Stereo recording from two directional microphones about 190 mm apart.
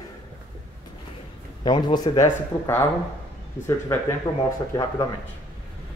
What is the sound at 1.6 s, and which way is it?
Speech, 25° left (ahead or behind).